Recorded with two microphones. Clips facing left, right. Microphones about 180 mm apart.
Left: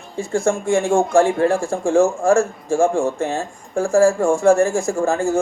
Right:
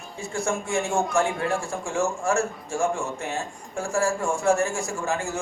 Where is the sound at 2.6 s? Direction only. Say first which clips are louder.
Left 11 dB; 90° left.